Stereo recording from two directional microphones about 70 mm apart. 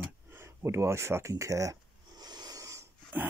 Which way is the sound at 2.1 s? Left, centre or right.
Right.